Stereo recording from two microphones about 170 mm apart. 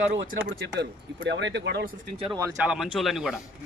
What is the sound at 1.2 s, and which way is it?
Speech, 90° right.